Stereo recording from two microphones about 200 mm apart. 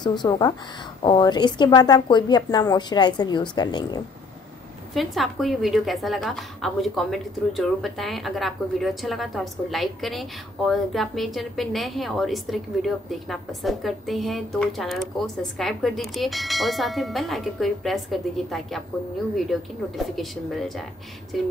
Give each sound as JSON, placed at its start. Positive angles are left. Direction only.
{"t": 0.0, "sound": "a woman's voice", "side_deg": 20}
{"t": 4.9, "sound": "a woman's voice", "side_deg": 0}
{"t": 20.0, "sound": "a woman's voice", "side_deg": 0}